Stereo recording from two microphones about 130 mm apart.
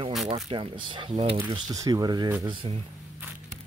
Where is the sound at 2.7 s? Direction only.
45° right (ahead or behind).